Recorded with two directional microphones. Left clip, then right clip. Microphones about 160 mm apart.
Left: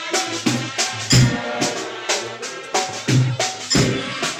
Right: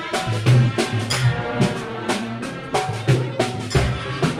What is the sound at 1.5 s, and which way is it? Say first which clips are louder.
Music: left 1 dB; 80° right.